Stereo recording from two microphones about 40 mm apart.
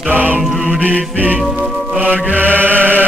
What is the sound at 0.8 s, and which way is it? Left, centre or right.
Music, right.